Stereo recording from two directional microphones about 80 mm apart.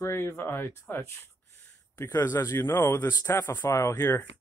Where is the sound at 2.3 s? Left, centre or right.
Left.